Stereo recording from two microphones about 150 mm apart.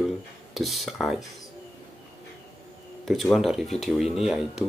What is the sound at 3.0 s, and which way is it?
Speech, centre (ahead or behind).